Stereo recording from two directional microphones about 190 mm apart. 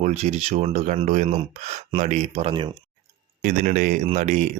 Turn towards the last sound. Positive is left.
turn(degrees=-35)  # may be behind; listen again after turning